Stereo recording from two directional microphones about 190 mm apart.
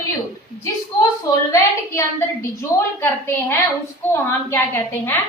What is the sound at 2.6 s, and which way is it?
A woman's voice, 15° left (ahead or behind).